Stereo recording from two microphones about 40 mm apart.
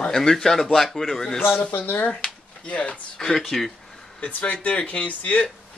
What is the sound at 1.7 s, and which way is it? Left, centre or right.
Speech, left.